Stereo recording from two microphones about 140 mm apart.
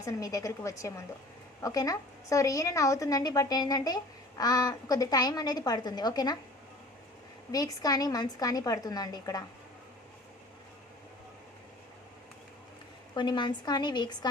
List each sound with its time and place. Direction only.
0.0 s a woman's voice: 25° left (ahead or behind)
7.5 s a woman's voice: 25° left (ahead or behind)
13.1 s a woman's voice: 35° left (ahead or behind)